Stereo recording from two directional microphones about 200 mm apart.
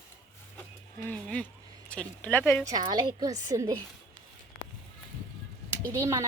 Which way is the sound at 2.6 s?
20° right (ahead or behind).